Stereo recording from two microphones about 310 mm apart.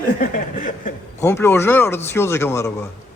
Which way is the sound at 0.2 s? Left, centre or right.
Left.